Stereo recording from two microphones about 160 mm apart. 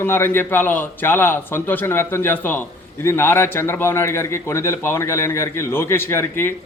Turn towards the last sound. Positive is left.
turn(degrees=15)  # may be behind; listen again after turning